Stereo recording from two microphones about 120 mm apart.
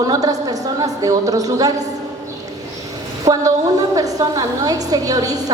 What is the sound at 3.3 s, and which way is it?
A woman's voice, 35° right (ahead or behind).